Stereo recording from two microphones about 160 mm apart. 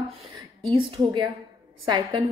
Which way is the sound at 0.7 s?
30° right (ahead or behind).